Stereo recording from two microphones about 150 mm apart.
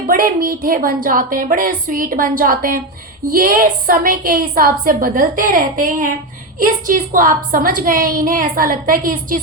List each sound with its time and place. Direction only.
0.1 s a woman's voice: 75° right (ahead or behind)